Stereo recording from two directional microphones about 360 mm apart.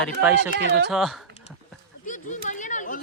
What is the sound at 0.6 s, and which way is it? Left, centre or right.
Speech, right.